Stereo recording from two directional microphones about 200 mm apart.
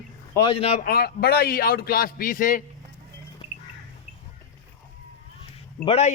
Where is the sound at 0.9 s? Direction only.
50° left (ahead or behind).